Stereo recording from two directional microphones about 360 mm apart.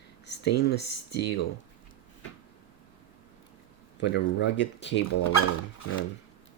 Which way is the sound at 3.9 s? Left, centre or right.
Left.